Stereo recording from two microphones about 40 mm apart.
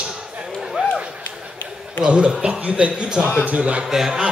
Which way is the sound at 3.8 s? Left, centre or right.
Centre.